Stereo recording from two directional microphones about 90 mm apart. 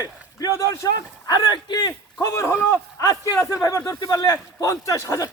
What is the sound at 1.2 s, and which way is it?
Speech, 50° left (ahead or behind).